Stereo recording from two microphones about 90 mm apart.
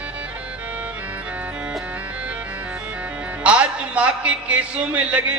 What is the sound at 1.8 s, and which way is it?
Speech, 15° right (ahead or behind).